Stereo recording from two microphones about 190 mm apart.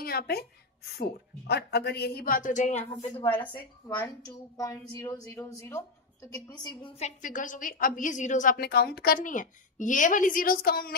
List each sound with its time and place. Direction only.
0.0 s a woman's voice: 55° left (ahead or behind); by 6.9 s 20° left (ahead or behind)
7.0 s a woman's voice: 40° left (ahead or behind)